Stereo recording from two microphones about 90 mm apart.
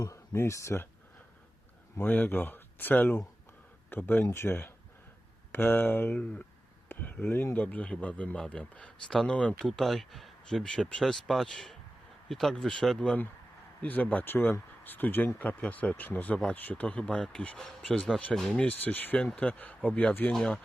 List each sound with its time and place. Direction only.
0.0 s speech: 35° left (ahead or behind)
2.0 s speech: 20° left (ahead or behind)
6.8 s a sound: 20° left (ahead or behind)
7.3 s speech: 20° left (ahead or behind)